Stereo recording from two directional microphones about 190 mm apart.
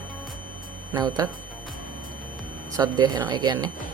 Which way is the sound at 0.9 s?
20° right (ahead or behind).